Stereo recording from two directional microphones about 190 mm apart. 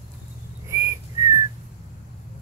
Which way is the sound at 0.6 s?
15° right (ahead or behind).